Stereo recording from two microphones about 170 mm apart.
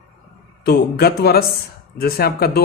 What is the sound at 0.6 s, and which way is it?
A man's voice, 70° left (ahead or behind).